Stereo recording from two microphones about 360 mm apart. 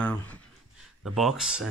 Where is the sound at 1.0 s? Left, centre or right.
Centre.